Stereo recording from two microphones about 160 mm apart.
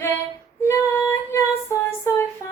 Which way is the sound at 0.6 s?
15° left (ahead or behind).